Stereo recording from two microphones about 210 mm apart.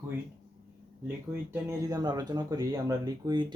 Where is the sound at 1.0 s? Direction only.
10° right (ahead or behind).